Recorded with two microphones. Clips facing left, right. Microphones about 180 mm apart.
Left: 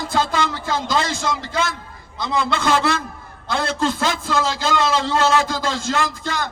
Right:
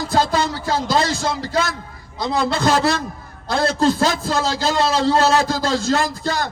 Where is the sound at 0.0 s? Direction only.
40° right (ahead or behind).